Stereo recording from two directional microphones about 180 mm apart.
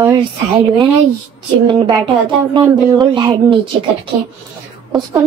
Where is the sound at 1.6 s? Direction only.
25° right (ahead or behind).